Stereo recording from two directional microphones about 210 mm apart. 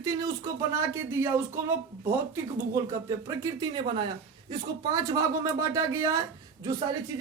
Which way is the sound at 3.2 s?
20° right (ahead or behind).